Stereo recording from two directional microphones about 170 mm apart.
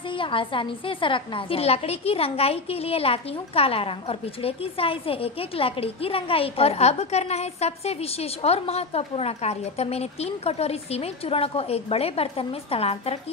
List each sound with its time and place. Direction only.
0.2 s a woman's voice: 30° left (ahead or behind)